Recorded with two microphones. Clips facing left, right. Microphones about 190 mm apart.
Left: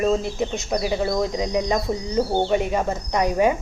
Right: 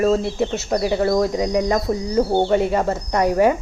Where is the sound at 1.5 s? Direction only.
20° left (ahead or behind).